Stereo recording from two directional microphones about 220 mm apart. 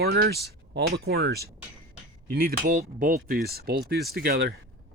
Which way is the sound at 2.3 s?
40° right (ahead or behind).